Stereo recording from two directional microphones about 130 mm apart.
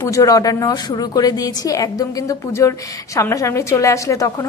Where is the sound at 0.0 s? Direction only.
25° left (ahead or behind).